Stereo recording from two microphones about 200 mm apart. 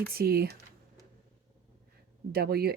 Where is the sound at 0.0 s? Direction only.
50° right (ahead or behind).